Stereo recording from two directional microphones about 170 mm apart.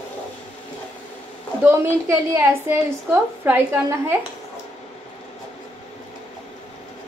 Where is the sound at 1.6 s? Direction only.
15° right (ahead or behind).